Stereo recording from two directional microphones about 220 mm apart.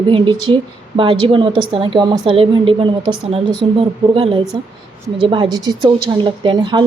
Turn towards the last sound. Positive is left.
turn(degrees=-20)  # may be behind; listen again after turning